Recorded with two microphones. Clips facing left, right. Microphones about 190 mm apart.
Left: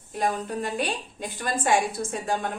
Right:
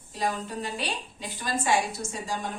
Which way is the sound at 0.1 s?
55° left (ahead or behind).